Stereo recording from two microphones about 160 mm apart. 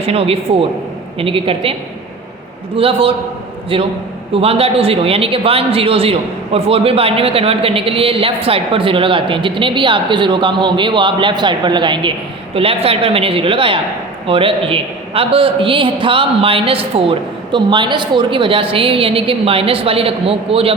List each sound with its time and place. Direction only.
0.0 s a man's voice: 40° right (ahead or behind)
2.7 s a man's voice: 35° right (ahead or behind)